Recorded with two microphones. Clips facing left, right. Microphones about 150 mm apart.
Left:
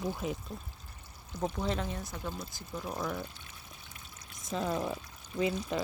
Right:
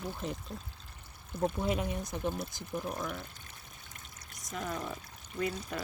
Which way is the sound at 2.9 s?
5° left (ahead or behind).